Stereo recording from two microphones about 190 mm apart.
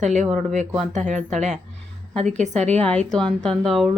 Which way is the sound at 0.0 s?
40° right (ahead or behind).